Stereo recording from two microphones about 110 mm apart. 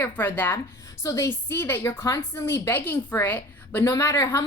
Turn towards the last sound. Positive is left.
turn(degrees=30)  # may be behind; listen again after turning